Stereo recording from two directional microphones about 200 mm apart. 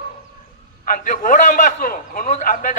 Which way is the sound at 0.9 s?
40° left (ahead or behind).